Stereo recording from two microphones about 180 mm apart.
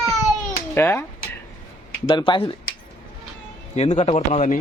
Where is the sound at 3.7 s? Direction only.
35° left (ahead or behind).